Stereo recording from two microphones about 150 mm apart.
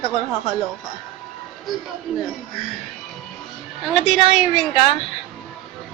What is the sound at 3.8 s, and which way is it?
Speech, centre (ahead or behind).